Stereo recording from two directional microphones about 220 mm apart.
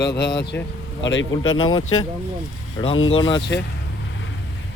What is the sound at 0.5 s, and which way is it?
Speech, 5° left (ahead or behind).